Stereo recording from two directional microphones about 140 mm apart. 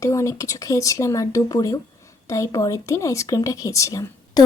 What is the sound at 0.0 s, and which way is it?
A woman's voice, 20° left (ahead or behind).